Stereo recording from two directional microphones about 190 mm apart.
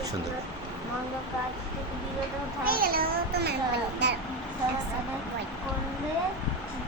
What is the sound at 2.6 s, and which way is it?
Speech, 50° right (ahead or behind).